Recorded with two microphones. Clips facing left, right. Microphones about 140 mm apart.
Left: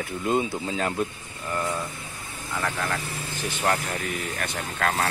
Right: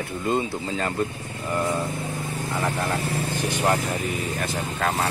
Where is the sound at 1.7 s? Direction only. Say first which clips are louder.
Right 6 dB; 45° right (ahead or behind).